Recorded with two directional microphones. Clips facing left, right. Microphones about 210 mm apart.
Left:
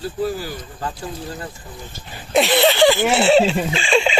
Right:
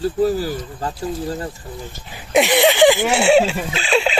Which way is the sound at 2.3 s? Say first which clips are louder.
Right 1 dB; 15° right (ahead or behind).